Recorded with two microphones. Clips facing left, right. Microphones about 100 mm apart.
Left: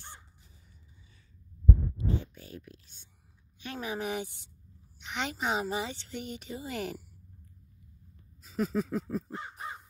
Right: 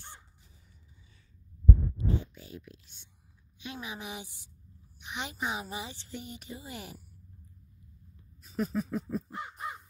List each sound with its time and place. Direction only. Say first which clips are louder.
2.2 s whispering: even; 50° left (ahead or behind)
3.5 s a woman's voice: left 5 dB; 50° left (ahead or behind); by 7.1 s 65° left (ahead or behind)
8.4 s a sound: left 2 dB; 90° left
9.3 s crow: right 1 dB; 35° left (ahead or behind)